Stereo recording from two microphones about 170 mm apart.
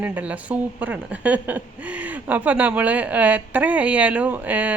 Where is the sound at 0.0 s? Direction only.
10° right (ahead or behind).